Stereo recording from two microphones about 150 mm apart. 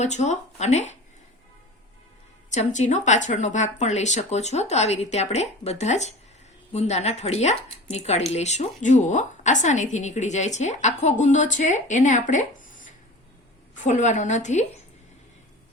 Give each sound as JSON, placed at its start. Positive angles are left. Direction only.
{"t": 0.0, "sound": "speech", "side_deg": 50}
{"t": 2.5, "sound": "speech", "side_deg": 50}